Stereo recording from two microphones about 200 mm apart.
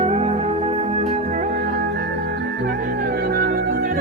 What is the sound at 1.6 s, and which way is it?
Music, 55° right (ahead or behind).